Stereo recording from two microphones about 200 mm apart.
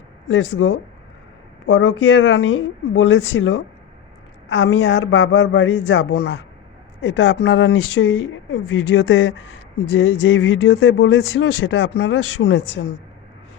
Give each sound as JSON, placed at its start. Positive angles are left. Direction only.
{"t": 0.3, "sound": "speech", "side_deg": 70}